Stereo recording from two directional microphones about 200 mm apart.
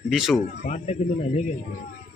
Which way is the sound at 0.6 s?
35° left (ahead or behind).